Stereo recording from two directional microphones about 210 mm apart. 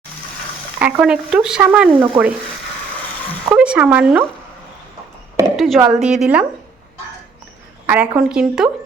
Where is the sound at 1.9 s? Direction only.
20° right (ahead or behind).